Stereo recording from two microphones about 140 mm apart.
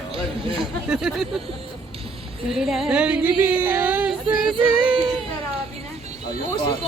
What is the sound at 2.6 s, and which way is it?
Music, centre (ahead or behind).